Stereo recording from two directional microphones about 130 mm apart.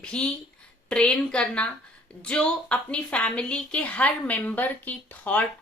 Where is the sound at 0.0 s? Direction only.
10° left (ahead or behind).